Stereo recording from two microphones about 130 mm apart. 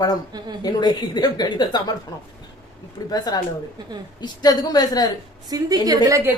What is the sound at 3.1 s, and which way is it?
A woman's voice, 30° left (ahead or behind).